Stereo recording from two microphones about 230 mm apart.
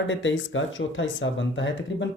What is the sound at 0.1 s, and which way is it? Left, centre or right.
Speech, left.